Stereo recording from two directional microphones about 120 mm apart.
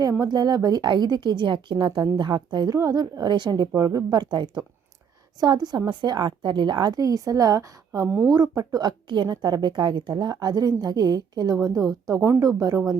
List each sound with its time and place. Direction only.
0.0 s a woman's voice: 30° right (ahead or behind)